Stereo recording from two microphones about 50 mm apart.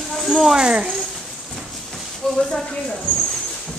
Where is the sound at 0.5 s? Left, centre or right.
Centre.